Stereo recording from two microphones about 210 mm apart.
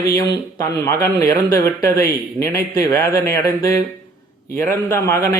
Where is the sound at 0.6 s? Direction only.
15° left (ahead or behind).